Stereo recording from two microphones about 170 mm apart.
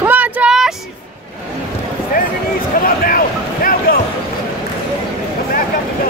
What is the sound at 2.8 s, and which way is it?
Basketball bounce, 55° left (ahead or behind).